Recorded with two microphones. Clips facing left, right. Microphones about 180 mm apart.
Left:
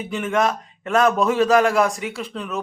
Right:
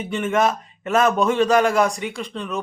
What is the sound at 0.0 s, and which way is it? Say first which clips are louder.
A man's voice: right 1 dB; centre (ahead or behind).